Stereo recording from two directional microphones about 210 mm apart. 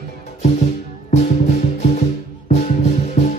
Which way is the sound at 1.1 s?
30° left (ahead or behind).